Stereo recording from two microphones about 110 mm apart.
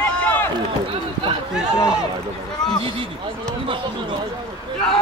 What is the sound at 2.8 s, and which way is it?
Speech, 50° right (ahead or behind).